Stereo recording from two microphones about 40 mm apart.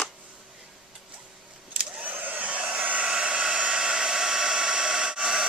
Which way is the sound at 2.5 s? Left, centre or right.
Right.